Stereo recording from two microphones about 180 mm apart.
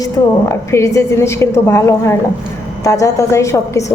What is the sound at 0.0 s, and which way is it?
A woman's voice, 15° left (ahead or behind).